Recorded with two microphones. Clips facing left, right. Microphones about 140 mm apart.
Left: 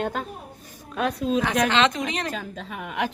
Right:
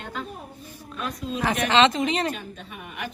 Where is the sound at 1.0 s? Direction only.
70° left (ahead or behind).